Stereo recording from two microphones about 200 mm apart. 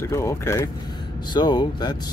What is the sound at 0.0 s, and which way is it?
Speech, 15° left (ahead or behind).